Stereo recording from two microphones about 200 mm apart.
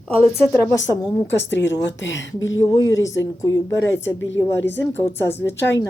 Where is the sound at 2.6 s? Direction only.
20° left (ahead or behind).